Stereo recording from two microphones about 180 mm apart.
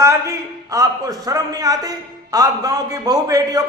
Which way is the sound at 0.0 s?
15° right (ahead or behind).